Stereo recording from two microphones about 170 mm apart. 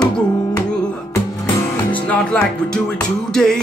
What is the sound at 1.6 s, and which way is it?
Music, 10° left (ahead or behind).